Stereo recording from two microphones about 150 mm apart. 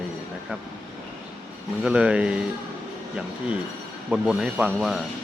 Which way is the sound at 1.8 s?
5° right (ahead or behind).